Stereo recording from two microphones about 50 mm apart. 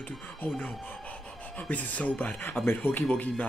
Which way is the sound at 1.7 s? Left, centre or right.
Left.